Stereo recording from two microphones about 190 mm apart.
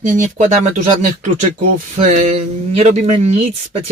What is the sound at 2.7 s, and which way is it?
Speech, 35° right (ahead or behind).